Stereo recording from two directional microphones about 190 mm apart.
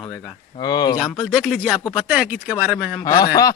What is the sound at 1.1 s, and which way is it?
Speech, centre (ahead or behind).